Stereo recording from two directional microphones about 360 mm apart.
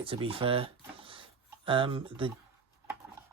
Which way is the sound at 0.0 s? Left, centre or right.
Centre.